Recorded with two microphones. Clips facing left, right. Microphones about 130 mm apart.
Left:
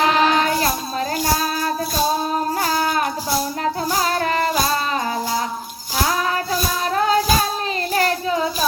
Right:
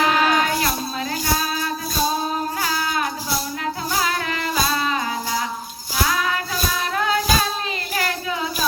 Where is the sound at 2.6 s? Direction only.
40° left (ahead or behind).